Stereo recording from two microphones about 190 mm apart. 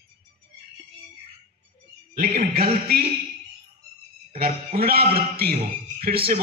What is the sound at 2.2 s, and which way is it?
Speech, 50° right (ahead or behind).